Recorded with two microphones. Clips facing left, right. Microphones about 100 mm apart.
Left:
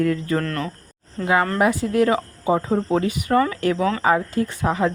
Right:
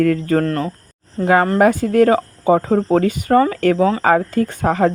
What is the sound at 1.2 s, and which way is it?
Speech, 45° right (ahead or behind).